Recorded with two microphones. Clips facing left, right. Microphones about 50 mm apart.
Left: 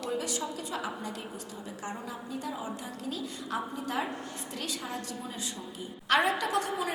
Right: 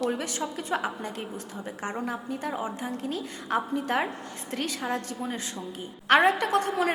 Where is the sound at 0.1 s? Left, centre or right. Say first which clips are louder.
Right 2 dB; right.